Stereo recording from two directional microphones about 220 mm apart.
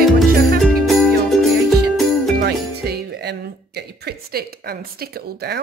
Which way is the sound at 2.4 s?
45° right (ahead or behind).